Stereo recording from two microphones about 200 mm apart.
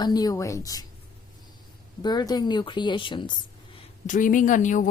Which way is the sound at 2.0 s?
20° left (ahead or behind).